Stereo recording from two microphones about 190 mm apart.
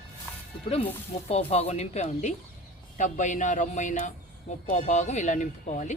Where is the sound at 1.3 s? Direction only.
35° left (ahead or behind).